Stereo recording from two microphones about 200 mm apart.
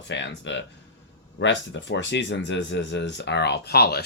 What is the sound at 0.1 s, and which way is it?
Speech, 65° left (ahead or behind).